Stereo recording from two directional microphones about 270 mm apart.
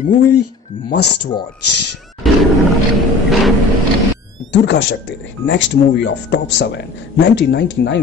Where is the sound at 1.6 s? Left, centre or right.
Left.